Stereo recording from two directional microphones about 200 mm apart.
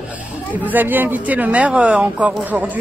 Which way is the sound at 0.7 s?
10° right (ahead or behind).